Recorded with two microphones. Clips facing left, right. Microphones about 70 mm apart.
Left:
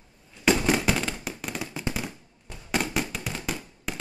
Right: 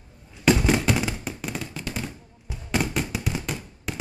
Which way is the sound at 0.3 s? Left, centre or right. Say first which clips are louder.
Right 2 dB; centre.